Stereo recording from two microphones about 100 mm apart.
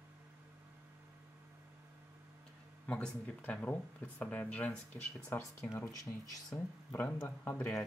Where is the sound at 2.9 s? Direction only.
15° left (ahead or behind).